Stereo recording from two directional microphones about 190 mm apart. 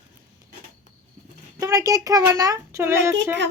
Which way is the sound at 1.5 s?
15° right (ahead or behind).